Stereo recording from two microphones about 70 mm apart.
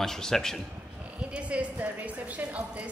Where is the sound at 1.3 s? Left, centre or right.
Centre.